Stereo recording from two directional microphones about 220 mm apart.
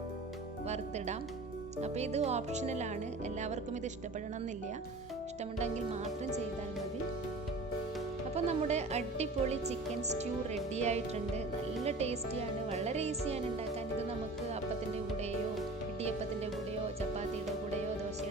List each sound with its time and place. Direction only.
0.7 s speech: 30° right (ahead or behind)
5.5 s speech: 30° right (ahead or behind)
8.4 s speech: 30° right (ahead or behind)
10.8 s speech: 30° right (ahead or behind)